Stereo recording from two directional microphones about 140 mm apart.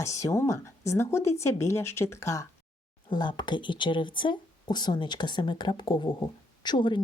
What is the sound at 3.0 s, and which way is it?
A woman's voice, 35° left (ahead or behind).